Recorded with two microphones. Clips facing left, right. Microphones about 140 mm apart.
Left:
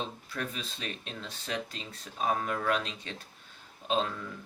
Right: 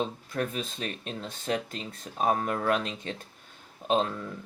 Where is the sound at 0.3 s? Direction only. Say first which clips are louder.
Right 6 dB; 45° right (ahead or behind).